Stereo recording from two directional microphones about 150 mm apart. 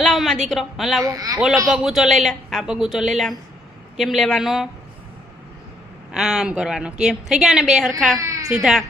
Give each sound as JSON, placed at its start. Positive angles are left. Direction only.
{"t": 0.0, "sound": "a sound", "side_deg": 0}
{"t": 0.4, "sound": "a woman's voice", "side_deg": 0}
{"t": 1.0, "sound": "a man's voice", "side_deg": -25}
{"t": 1.6, "sound": "a woman's voice", "side_deg": 0}
{"t": 6.1, "sound": "a woman's voice", "side_deg": -5}
{"t": 8.2, "sound": "baby cry", "side_deg": -20}
{"t": 8.4, "sound": "a woman's voice", "side_deg": -5}